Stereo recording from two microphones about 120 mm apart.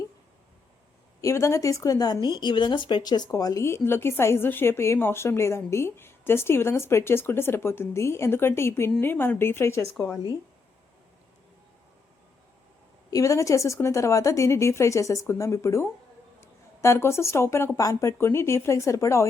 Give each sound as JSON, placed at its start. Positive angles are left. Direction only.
{"t": 1.2, "sound": "speech", "side_deg": 25}
{"t": 13.1, "sound": "speech", "side_deg": 25}